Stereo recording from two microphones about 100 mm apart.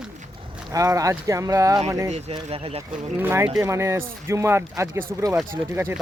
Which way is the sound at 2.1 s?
90° right.